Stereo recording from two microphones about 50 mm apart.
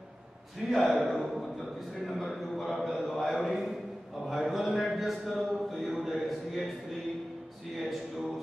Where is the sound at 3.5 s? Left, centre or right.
Centre.